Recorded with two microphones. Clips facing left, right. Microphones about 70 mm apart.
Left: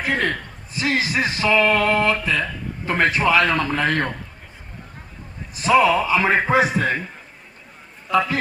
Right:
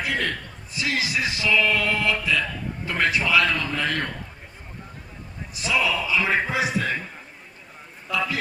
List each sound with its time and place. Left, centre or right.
0.0 s a man's voice: left
5.5 s a man's voice: left
8.1 s a man's voice: left